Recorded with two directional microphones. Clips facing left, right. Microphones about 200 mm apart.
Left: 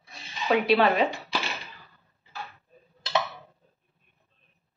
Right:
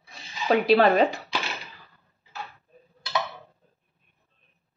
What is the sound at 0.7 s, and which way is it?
Speech, 40° right (ahead or behind).